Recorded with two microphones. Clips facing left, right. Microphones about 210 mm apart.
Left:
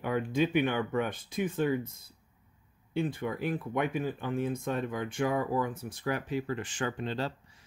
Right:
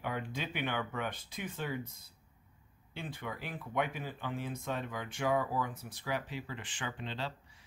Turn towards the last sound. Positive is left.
turn(degrees=45)  # may be behind; listen again after turning